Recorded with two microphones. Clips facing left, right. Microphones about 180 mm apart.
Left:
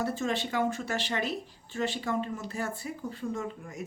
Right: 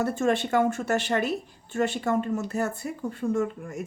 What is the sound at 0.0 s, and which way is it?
Speech, 55° right (ahead or behind).